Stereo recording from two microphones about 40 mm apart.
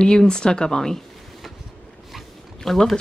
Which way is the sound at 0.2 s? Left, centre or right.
Centre.